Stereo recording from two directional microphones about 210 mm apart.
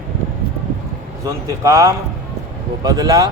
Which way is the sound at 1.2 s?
15° right (ahead or behind).